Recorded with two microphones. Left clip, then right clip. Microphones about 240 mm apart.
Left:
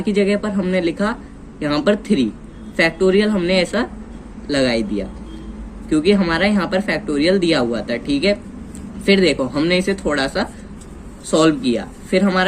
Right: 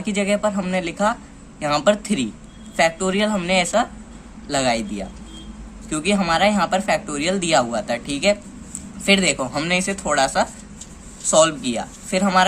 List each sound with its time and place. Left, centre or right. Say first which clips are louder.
0.0 s speech: left 2 dB; right